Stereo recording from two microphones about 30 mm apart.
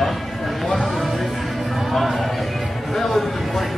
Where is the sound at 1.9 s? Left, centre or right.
Centre.